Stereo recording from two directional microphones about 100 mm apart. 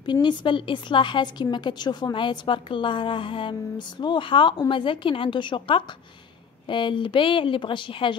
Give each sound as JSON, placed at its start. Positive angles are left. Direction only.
{"t": 0.0, "sound": "a woman's voice", "side_deg": 50}